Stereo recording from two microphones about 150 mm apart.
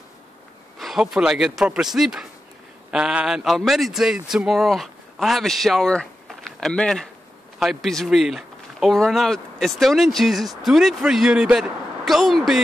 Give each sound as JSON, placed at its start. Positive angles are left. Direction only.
{"t": 0.7, "sound": "a man's voice", "side_deg": 0}